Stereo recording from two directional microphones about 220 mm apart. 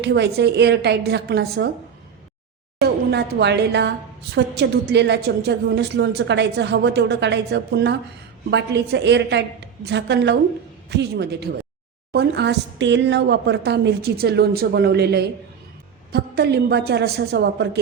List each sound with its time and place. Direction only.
0.0 s a woman's voice: 50° right (ahead or behind)
2.8 s a woman's voice: 45° right (ahead or behind)